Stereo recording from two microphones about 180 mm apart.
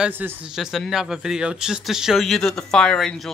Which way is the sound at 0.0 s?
10° right (ahead or behind).